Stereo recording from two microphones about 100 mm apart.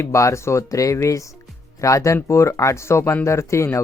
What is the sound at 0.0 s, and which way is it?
Speech, 30° left (ahead or behind).